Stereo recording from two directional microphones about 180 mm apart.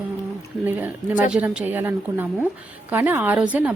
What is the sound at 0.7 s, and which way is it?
Speech, 10° right (ahead or behind).